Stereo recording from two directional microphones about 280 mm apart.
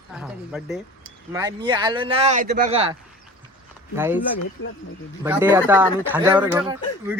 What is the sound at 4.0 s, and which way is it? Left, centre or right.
Speech, centre.